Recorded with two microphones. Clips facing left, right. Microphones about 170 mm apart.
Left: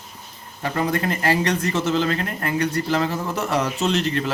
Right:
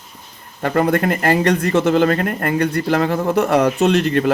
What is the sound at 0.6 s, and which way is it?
Speech, 60° right (ahead or behind).